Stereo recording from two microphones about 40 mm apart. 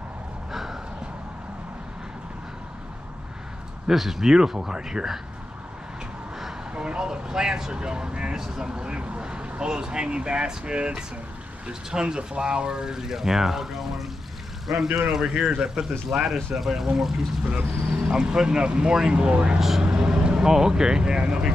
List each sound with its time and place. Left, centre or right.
0.5 s a sound: centre
3.9 s speech: centre
6.7 s speech: right; by 14.0 s centre
15.0 s speech: centre